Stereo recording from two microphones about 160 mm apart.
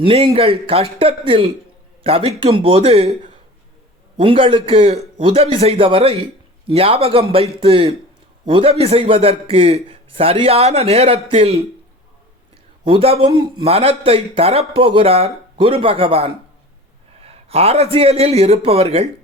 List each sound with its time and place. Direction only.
0.0 s a man's voice: 35° right (ahead or behind)
4.2 s a man's voice: 35° right (ahead or behind)
12.8 s a man's voice: 35° right (ahead or behind)